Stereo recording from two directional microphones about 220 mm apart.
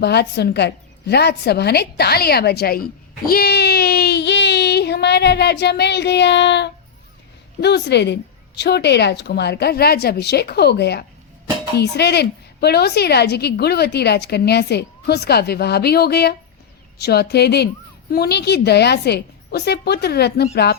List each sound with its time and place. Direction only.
0.0 s a woman's voice: 50° left (ahead or behind)
3.2 s child singing: 45° left (ahead or behind)
7.6 s a woman's voice: 50° left (ahead or behind)